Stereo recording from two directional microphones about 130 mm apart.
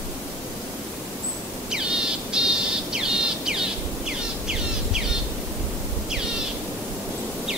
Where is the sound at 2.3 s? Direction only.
5° right (ahead or behind).